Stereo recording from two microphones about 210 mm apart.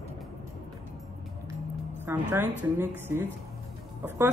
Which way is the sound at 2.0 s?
10° right (ahead or behind).